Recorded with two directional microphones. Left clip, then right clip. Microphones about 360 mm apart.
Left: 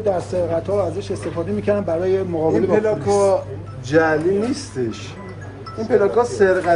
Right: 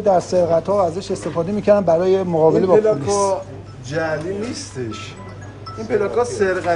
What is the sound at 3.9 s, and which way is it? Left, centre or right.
Speech, centre.